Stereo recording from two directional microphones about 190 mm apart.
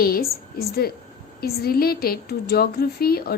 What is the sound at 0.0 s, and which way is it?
A woman's voice, 50° left (ahead or behind).